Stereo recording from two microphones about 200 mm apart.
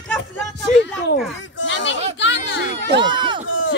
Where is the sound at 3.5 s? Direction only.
70° left (ahead or behind).